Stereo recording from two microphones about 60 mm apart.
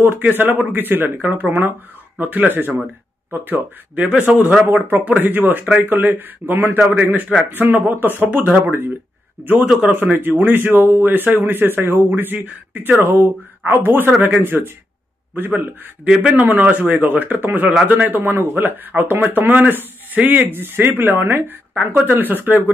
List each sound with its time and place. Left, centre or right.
0.0 s speech: right
9.7 s speech: centre
9.9 s speech: right
13.0 s speech: right
16.1 s speech: centre
16.3 s speech: right